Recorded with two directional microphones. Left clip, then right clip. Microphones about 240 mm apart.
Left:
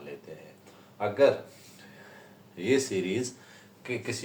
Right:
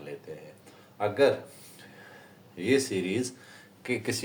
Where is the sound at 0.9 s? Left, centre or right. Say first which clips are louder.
Left 1 dB; right.